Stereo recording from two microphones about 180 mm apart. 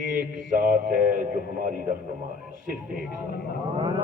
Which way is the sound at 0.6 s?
50° right (ahead or behind).